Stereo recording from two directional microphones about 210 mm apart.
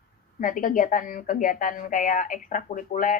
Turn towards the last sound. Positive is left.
turn(degrees=40)  # may be behind; listen again after turning